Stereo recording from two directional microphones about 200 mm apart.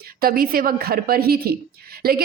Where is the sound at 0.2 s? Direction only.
45° right (ahead or behind).